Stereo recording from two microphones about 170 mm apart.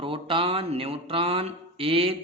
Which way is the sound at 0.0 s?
30° right (ahead or behind).